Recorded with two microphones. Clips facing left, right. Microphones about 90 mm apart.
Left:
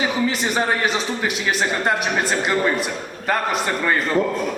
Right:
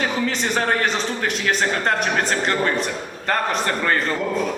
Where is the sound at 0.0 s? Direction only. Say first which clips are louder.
Left 1 dB; 5° left (ahead or behind).